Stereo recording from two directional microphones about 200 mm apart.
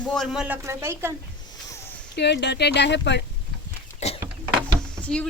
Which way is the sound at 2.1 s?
60° left (ahead or behind).